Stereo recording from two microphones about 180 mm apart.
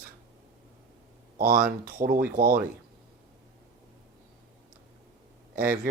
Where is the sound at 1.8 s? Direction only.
50° right (ahead or behind).